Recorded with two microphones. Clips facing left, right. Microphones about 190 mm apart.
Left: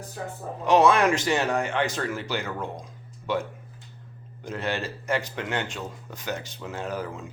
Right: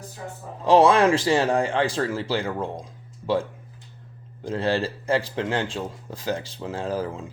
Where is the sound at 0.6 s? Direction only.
30° right (ahead or behind).